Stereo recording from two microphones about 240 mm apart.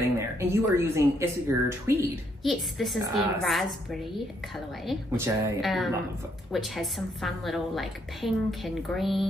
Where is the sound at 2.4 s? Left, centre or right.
Centre.